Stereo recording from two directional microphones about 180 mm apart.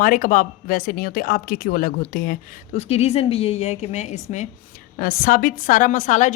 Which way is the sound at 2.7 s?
35° left (ahead or behind).